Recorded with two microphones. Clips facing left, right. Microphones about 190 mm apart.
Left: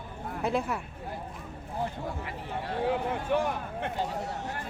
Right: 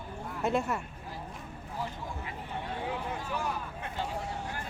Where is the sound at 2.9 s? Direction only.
60° left (ahead or behind).